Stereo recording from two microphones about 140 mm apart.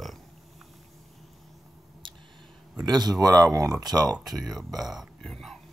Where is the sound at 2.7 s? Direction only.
30° right (ahead or behind).